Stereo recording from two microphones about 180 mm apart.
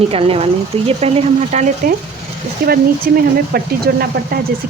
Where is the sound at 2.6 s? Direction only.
55° right (ahead or behind).